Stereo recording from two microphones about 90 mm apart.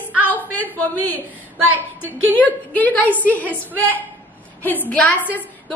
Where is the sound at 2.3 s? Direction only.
20° left (ahead or behind).